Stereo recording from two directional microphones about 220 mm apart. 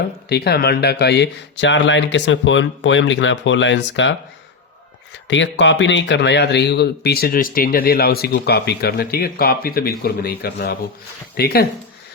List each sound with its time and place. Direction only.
0.3 s speech: 45° left (ahead or behind)
5.3 s speech: 55° left (ahead or behind)